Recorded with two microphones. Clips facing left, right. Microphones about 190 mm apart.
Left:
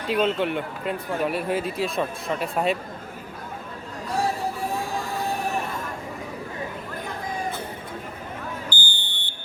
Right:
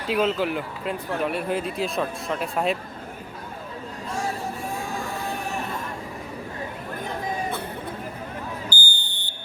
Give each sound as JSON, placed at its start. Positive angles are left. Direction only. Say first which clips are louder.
{"t": 0.1, "sound": "speech", "louder": "even", "side_deg": 0}
{"t": 8.7, "sound": "smoke detector", "louder": "even", "side_deg": -40}